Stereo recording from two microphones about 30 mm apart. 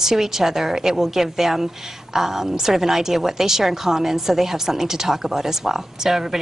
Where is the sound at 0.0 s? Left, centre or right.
Centre.